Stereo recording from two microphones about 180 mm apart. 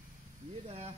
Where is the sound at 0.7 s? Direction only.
35° right (ahead or behind).